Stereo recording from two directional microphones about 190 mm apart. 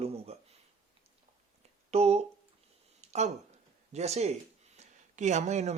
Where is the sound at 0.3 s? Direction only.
30° right (ahead or behind).